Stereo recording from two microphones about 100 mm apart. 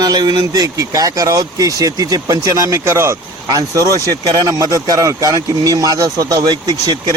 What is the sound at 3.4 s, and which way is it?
Speech, 40° right (ahead or behind).